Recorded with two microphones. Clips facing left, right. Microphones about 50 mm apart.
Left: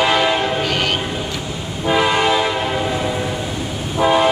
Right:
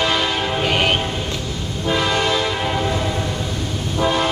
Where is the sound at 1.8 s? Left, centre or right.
Centre.